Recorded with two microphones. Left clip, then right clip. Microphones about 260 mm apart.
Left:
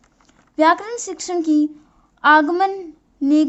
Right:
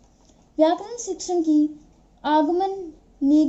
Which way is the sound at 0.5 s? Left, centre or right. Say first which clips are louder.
Left 4 dB; left.